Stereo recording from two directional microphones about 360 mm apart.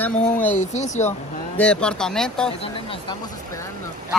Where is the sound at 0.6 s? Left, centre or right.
Centre.